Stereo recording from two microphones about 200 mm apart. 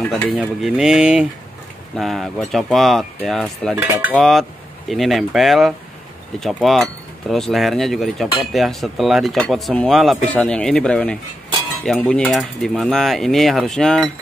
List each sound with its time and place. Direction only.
0.3 s speech: centre (ahead or behind)
3.7 s cutlery: 5° right (ahead or behind)
4.1 s speech: centre (ahead or behind)